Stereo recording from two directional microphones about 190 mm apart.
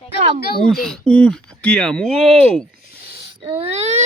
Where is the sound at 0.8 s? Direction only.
5° left (ahead or behind).